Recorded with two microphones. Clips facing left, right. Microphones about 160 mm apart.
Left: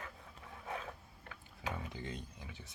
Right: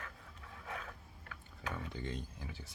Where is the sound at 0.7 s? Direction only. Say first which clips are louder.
Left 3 dB; 25° left (ahead or behind).